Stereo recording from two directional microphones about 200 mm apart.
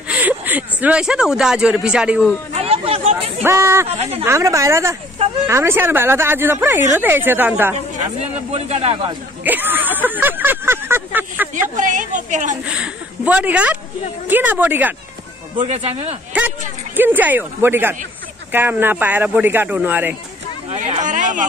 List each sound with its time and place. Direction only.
0.1 s speech: 10° right (ahead or behind)
2.5 s chatter: 30° right (ahead or behind)
3.4 s speech: 15° right (ahead or behind)
3.9 s speech: 30° right (ahead or behind)
4.2 s speech: 15° right (ahead or behind)
7.7 s speech: 30° right (ahead or behind)
9.4 s speech: 10° right (ahead or behind)
11.7 s speech: 40° right (ahead or behind)
12.6 s speech: 5° right (ahead or behind)
15.6 s speech: 35° right (ahead or behind)
16.3 s speech: 10° right (ahead or behind)
20.7 s a sound: 35° right (ahead or behind)